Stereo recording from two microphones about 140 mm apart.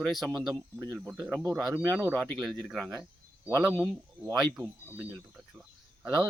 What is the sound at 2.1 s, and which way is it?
Speech, centre (ahead or behind).